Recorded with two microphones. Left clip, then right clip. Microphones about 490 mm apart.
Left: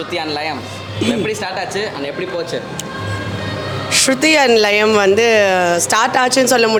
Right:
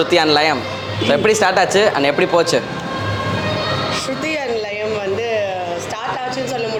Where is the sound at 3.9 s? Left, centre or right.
Left.